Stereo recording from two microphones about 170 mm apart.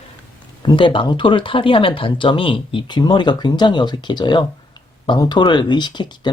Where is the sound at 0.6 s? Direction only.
30° left (ahead or behind).